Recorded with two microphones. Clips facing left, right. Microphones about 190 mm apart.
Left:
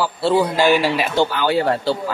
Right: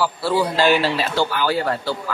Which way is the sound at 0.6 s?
15° left (ahead or behind).